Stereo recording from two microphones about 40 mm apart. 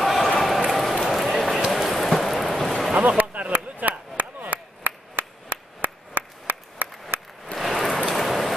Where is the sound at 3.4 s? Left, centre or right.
Right.